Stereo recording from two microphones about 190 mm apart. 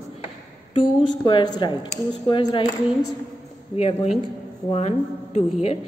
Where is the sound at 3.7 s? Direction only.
30° left (ahead or behind).